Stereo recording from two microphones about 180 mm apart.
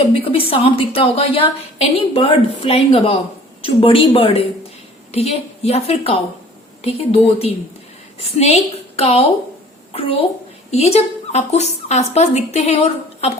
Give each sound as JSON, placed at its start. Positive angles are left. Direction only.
{"t": 0.0, "sound": "a woman's voice", "side_deg": 30}